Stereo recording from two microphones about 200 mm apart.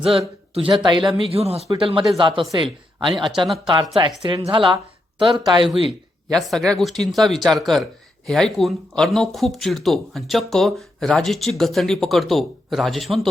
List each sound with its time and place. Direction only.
0.5 s speech: 25° right (ahead or behind)
6.2 s speech: centre (ahead or behind)